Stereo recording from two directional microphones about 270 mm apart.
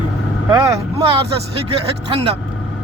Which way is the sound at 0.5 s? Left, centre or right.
Centre.